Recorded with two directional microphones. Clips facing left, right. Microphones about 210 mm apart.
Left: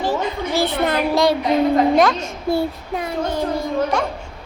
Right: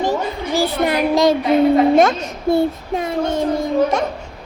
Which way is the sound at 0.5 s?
10° right (ahead or behind).